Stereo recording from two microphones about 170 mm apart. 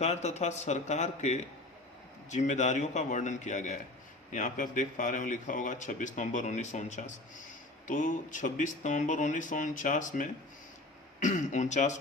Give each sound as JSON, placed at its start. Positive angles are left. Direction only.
{"t": 0.0, "sound": "speech", "side_deg": 40}